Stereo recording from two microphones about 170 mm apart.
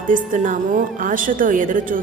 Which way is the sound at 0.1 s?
50° right (ahead or behind).